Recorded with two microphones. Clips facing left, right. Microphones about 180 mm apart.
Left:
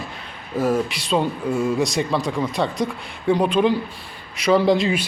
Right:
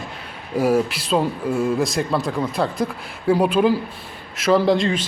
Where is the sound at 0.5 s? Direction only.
10° right (ahead or behind).